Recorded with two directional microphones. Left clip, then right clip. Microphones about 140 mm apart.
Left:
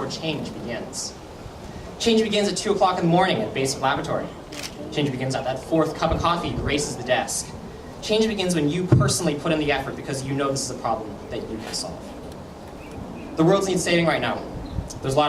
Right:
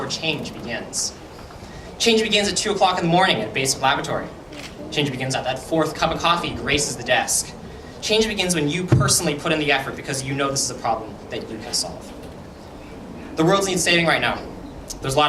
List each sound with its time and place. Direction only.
0.0 s a woman's voice: 15° right (ahead or behind)
13.3 s a woman's voice: 15° right (ahead or behind)